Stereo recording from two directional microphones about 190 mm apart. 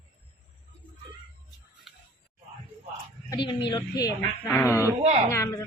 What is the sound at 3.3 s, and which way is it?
A woman's voice, 25° left (ahead or behind).